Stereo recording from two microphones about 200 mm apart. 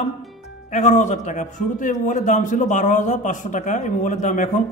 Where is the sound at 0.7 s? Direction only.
35° left (ahead or behind).